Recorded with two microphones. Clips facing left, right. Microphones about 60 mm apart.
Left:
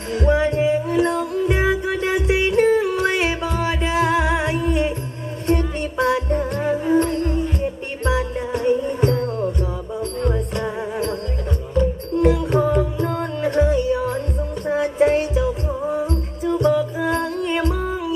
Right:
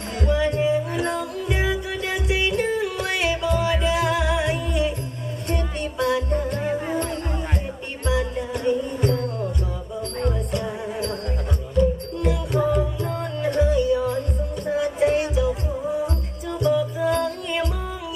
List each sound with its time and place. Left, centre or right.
0.2 s music: left
7.2 s music: right
8.0 s music: left